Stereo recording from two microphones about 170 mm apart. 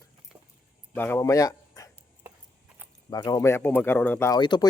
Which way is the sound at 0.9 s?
10° left (ahead or behind).